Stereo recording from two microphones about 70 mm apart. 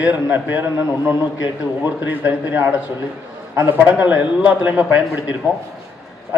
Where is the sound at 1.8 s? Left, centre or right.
Right.